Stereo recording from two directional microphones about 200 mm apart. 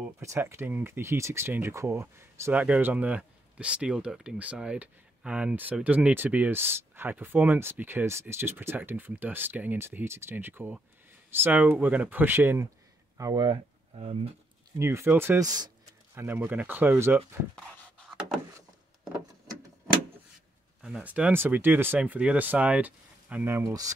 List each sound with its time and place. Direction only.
0.2 s speech: 15° right (ahead or behind); by 14.3 s 30° right (ahead or behind)
14.8 s speech: 10° right (ahead or behind)
17.6 s a sound: 5° left (ahead or behind)
20.8 s speech: 5° right (ahead or behind)